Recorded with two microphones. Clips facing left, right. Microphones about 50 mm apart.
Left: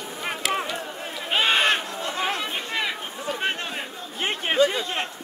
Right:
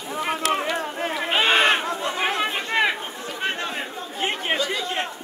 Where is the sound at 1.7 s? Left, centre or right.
Right.